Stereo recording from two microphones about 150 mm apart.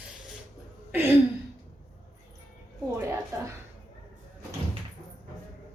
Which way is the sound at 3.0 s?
20° right (ahead or behind).